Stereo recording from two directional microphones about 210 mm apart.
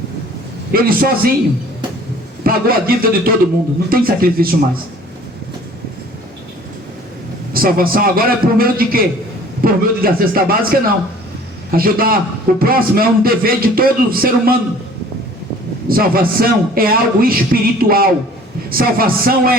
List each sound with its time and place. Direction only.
0.7 s a man's voice: 45° right (ahead or behind)
2.4 s a man's voice: 45° right (ahead or behind)
7.5 s a man's voice: 45° right (ahead or behind)
15.9 s a man's voice: 45° right (ahead or behind)